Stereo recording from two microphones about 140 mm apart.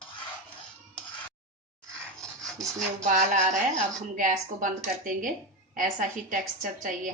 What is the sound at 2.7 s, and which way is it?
A woman's voice, 60° right (ahead or behind).